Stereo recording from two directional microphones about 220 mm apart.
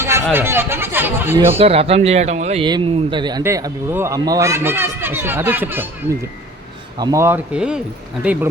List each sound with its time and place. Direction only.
0.3 s a man's voice: 10° right (ahead or behind)
1.5 s a man's voice: 25° right (ahead or behind); by 5.9 s 10° right (ahead or behind)
7.0 s a man's voice: 15° right (ahead or behind)